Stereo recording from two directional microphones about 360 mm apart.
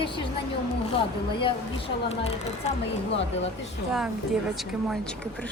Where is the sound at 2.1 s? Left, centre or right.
Centre.